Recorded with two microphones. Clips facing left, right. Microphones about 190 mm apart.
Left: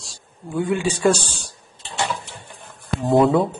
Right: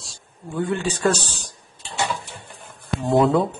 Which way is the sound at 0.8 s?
10° left (ahead or behind).